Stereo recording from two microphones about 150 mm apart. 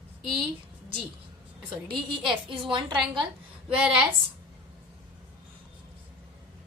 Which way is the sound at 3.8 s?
5° right (ahead or behind).